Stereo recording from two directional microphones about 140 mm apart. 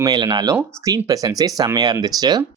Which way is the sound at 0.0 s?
30° right (ahead or behind).